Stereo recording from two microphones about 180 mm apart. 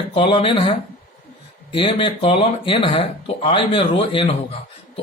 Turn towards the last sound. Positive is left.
turn(degrees=30)  # may be behind; listen again after turning